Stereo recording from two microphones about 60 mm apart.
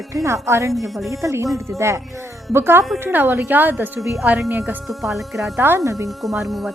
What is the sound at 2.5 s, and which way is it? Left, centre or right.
A woman's voice, right.